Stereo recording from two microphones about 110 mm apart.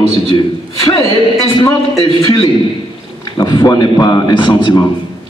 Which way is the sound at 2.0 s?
60° left (ahead or behind).